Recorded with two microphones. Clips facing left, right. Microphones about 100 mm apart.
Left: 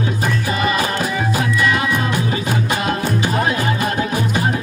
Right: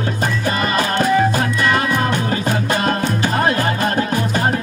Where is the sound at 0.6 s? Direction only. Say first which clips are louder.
Right 2 dB; 45° right (ahead or behind).